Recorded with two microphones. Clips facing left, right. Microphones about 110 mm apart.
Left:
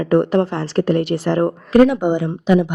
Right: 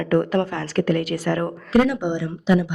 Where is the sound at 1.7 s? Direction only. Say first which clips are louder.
Left 6 dB; 50° left (ahead or behind).